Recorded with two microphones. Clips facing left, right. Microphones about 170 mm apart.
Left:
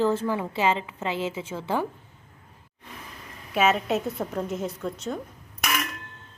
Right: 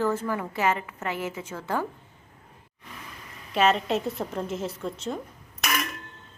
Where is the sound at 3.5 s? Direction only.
5° left (ahead or behind).